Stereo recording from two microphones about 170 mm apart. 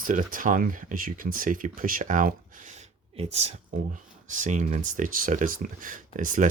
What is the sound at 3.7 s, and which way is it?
Speech, 50° right (ahead or behind).